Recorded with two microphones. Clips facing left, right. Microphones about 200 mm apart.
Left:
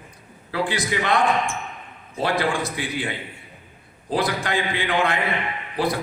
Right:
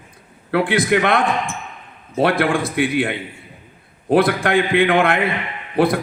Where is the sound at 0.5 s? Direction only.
55° right (ahead or behind).